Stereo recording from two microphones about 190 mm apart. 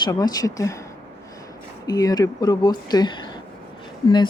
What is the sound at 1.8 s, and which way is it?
Speech, 20° left (ahead or behind).